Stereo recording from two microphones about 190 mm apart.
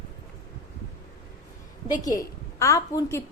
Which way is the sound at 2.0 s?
15° left (ahead or behind).